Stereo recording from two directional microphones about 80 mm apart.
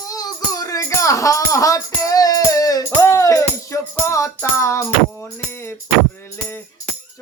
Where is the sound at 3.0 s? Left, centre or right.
Left.